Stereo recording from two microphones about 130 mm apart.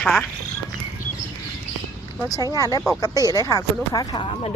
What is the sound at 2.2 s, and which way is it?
Speech, 30° left (ahead or behind).